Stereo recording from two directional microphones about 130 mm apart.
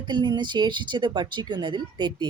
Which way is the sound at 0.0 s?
35° right (ahead or behind).